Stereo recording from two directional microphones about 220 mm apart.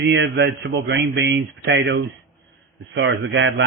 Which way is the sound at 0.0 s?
55° right (ahead or behind).